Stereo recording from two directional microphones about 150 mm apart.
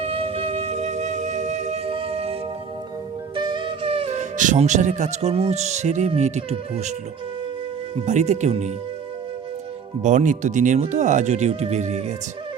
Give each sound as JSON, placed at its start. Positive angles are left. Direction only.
{"t": 0.0, "sound": "music", "side_deg": -40}
{"t": 3.3, "sound": "speech", "side_deg": -30}
{"t": 7.9, "sound": "speech", "side_deg": -50}
{"t": 10.0, "sound": "speech", "side_deg": -55}